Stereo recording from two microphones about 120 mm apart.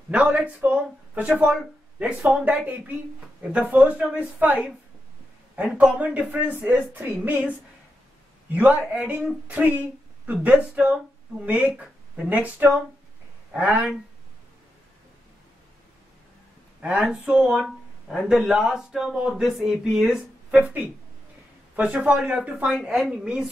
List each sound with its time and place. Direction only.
0.1 s a woman's voice: 10° right (ahead or behind)
8.5 s a woman's voice: 10° right (ahead or behind)
16.8 s a woman's voice: 10° right (ahead or behind)